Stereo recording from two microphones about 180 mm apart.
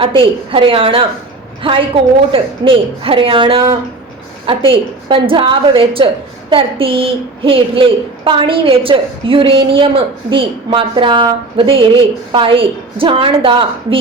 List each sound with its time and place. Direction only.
0.0 s a woman's voice: 30° right (ahead or behind)
2.3 s a woman's voice: 30° right (ahead or behind)